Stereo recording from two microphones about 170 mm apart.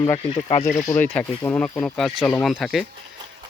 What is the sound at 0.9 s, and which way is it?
Speech, 10° left (ahead or behind).